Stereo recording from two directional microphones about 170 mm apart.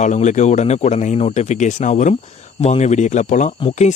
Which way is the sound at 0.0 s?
45° left (ahead or behind).